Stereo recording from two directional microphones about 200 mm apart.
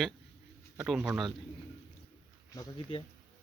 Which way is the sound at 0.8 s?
5° right (ahead or behind).